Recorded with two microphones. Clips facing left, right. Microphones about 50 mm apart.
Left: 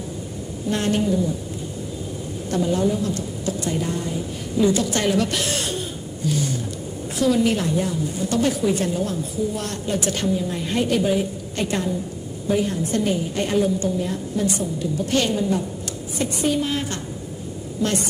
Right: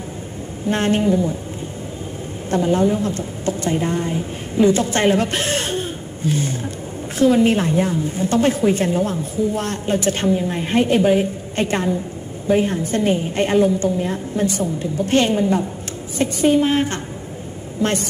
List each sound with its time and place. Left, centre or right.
0.7 s a woman's voice: right
2.5 s a woman's voice: right